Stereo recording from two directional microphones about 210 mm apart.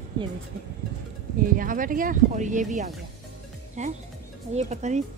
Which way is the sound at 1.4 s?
40° right (ahead or behind).